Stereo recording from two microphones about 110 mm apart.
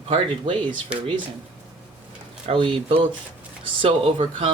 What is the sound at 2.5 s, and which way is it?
Speech, 50° right (ahead or behind).